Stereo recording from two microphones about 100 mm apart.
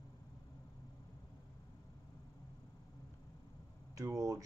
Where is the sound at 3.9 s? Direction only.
35° right (ahead or behind).